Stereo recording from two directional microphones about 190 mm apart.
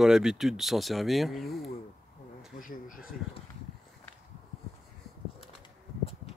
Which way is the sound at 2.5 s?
45° left (ahead or behind).